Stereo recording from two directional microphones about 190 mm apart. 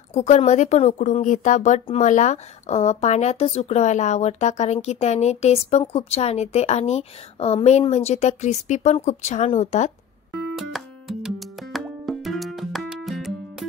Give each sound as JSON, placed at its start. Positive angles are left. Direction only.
{"t": 0.1, "sound": "a woman's voice", "side_deg": 35}
{"t": 10.6, "sound": "music", "side_deg": 0}